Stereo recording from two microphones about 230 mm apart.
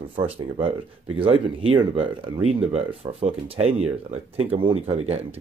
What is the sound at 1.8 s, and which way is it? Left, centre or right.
Speech, centre.